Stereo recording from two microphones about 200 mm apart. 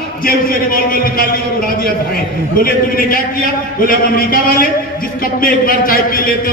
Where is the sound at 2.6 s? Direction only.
45° left (ahead or behind).